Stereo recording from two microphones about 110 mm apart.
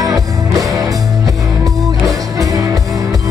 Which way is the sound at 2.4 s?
30° right (ahead or behind).